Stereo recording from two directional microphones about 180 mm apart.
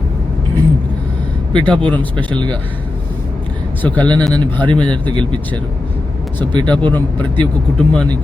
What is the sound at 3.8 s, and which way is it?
A man's voice, 10° left (ahead or behind).